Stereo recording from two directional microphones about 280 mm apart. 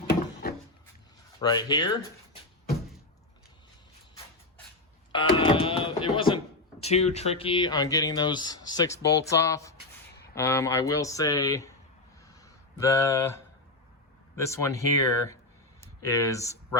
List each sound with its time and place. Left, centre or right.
1.4 s speech: centre
5.1 s speech: centre
12.3 s a sound: centre
14.3 s speech: centre